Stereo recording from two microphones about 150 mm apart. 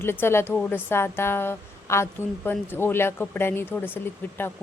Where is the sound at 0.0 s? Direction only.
15° left (ahead or behind).